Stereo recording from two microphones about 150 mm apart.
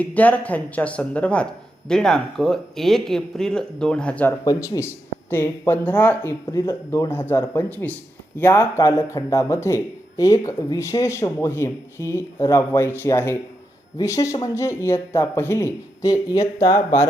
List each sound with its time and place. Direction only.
0.0 s speech: 10° left (ahead or behind)
4.4 s speech: 25° left (ahead or behind)